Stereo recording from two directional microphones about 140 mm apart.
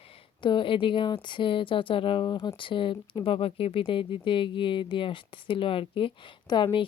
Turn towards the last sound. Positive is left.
turn(degrees=35)  # may be behind; listen again after turning